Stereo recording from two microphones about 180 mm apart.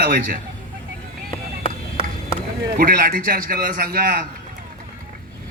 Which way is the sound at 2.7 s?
55° right (ahead or behind).